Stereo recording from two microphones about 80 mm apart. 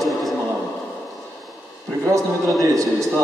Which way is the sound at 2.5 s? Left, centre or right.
Centre.